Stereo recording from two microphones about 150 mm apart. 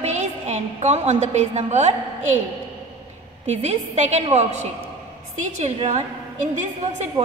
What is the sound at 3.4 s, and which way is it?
A woman's voice, 50° right (ahead or behind).